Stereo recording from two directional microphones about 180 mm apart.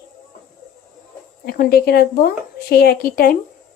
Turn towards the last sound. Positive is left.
turn(degrees=55)  # may be behind; listen again after turning